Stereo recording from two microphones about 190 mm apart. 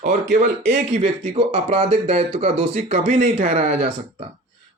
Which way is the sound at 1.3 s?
30° right (ahead or behind).